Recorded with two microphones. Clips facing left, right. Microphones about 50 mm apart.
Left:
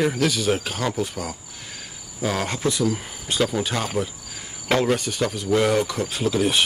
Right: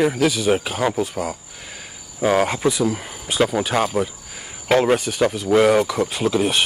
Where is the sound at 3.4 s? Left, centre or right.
Right.